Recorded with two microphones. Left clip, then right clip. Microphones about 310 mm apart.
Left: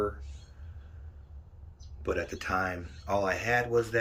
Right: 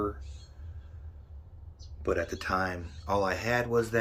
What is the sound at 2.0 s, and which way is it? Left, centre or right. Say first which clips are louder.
Speech: right 2 dB; centre.